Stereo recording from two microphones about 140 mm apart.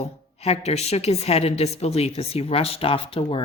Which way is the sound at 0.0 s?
45° left (ahead or behind).